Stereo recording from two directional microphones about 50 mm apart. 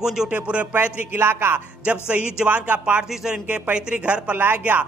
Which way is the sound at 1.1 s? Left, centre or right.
Right.